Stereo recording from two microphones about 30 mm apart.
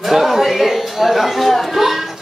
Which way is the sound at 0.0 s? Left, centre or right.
Centre.